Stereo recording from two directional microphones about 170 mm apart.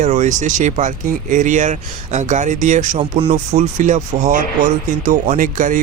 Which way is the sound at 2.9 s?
35° right (ahead or behind).